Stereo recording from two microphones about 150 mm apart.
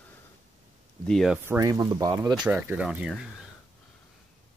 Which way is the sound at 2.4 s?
10° right (ahead or behind).